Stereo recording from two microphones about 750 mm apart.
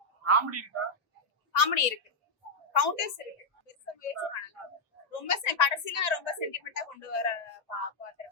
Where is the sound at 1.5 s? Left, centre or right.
Left.